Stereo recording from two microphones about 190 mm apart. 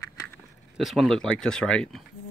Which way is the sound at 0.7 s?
Centre (ahead or behind).